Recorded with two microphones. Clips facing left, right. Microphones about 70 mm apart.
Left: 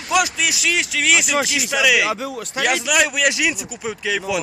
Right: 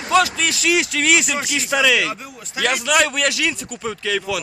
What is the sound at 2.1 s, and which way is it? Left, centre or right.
Speech, left.